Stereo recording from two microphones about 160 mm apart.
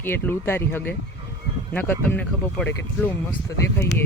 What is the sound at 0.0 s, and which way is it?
Speech, 15° left (ahead or behind).